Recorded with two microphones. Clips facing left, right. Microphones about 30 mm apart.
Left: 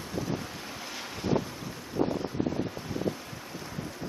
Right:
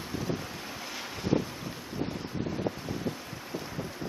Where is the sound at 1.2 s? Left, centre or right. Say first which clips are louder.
Even; centre.